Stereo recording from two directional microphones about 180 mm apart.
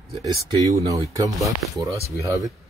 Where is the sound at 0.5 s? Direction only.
20° right (ahead or behind).